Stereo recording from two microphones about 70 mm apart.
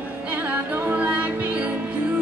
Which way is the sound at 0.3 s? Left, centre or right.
Right.